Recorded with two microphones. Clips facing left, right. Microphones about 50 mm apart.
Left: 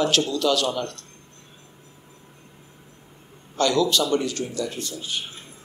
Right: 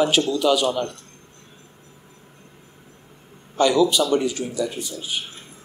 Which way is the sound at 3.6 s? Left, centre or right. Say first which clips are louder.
Right 3 dB; centre.